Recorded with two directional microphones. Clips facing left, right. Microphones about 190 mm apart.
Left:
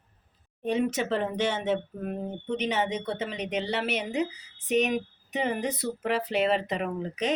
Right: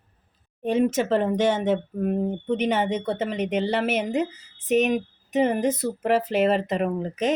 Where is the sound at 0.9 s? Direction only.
45° right (ahead or behind).